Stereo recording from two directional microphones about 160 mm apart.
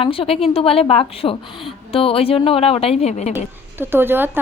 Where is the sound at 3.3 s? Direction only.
15° right (ahead or behind).